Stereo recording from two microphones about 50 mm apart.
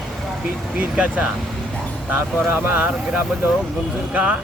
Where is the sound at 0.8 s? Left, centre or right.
Right.